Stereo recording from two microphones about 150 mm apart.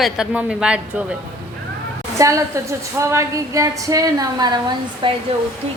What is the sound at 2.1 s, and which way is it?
A woman's voice, 20° right (ahead or behind).